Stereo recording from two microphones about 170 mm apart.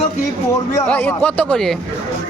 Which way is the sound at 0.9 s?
10° left (ahead or behind).